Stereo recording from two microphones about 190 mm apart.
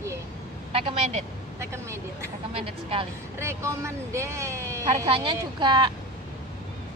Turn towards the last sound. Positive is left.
turn(degrees=-25)  # may be behind; listen again after turning